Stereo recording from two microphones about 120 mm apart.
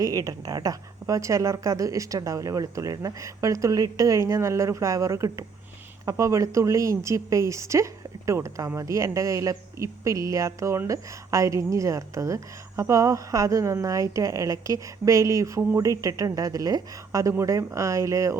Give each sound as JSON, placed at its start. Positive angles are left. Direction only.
{"t": 0.0, "sound": "speech", "side_deg": -30}